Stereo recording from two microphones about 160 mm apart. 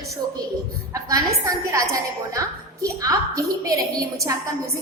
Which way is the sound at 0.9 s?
20° right (ahead or behind).